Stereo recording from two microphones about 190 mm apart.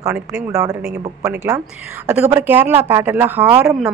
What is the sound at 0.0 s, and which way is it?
Speech, 15° right (ahead or behind).